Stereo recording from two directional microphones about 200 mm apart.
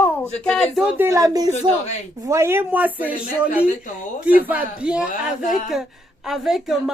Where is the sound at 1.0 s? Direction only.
15° right (ahead or behind).